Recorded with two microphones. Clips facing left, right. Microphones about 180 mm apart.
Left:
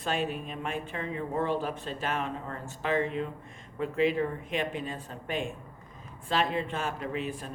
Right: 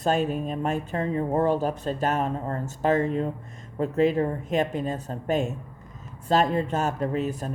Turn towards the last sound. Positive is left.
turn(degrees=-40)  # may be behind; listen again after turning